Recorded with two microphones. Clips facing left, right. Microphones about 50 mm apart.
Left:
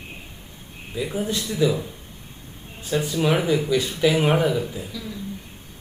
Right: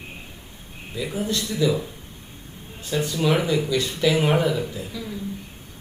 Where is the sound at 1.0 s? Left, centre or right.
Centre.